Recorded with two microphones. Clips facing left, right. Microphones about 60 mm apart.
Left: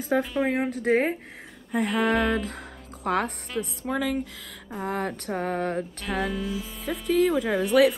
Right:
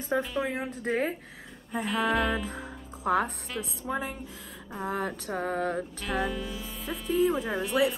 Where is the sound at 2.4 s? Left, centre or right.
Left.